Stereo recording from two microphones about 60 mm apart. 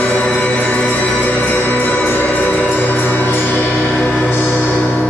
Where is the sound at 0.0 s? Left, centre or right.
Left.